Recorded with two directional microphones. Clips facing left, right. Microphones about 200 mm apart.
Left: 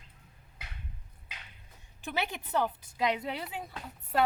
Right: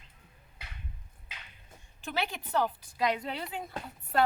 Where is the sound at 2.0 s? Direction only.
15° left (ahead or behind).